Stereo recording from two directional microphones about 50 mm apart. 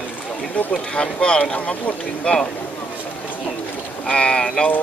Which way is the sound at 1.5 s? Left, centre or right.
Left.